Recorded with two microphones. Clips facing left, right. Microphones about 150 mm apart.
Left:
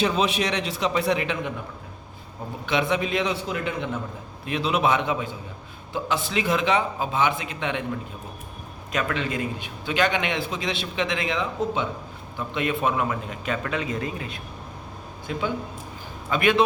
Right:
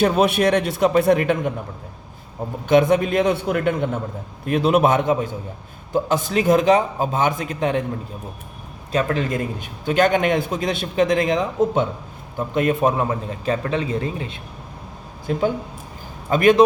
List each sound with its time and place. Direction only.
0.0 s a man's voice: 55° right (ahead or behind)
2.6 s a man's voice: 45° right (ahead or behind)
8.9 s a man's voice: 35° right (ahead or behind)
15.3 s a man's voice: 45° right (ahead or behind)